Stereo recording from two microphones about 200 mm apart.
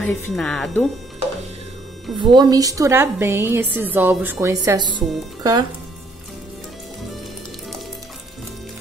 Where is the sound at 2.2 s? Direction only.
20° right (ahead or behind).